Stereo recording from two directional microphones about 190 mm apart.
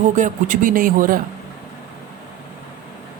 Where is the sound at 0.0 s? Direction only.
40° right (ahead or behind).